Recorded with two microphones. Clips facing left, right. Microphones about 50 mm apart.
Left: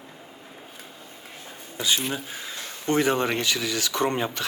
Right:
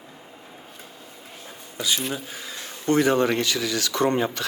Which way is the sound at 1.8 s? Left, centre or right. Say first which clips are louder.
Even; left.